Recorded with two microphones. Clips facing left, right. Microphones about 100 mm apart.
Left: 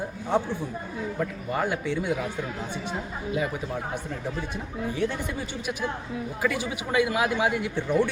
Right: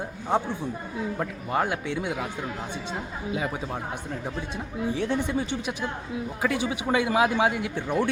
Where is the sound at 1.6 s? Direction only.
15° right (ahead or behind).